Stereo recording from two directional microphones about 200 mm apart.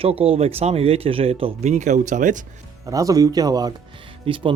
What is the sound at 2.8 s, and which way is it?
A man's voice, 15° right (ahead or behind).